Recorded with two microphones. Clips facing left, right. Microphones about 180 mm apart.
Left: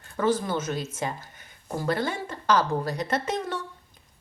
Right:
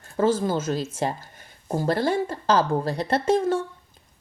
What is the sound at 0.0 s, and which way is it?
A woman's voice, 30° right (ahead or behind).